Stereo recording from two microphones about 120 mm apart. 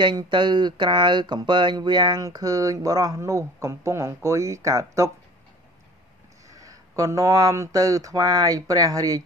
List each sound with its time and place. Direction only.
0.0 s speech: 40° right (ahead or behind)
6.6 s speech: 30° right (ahead or behind)